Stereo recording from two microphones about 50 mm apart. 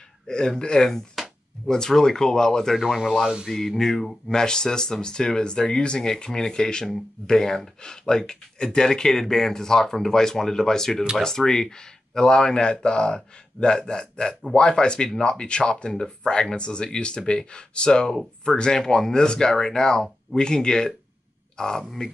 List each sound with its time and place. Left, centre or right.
0.6 s speech: centre